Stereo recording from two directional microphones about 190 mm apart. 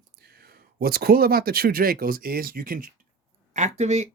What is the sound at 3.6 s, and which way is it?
Speech, 35° right (ahead or behind).